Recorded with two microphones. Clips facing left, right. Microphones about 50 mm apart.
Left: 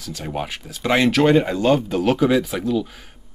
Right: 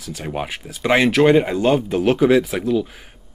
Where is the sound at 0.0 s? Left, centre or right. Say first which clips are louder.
Right 1 dB; centre.